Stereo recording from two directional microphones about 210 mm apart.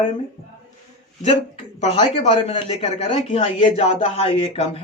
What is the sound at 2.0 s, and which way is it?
Speech, 30° left (ahead or behind).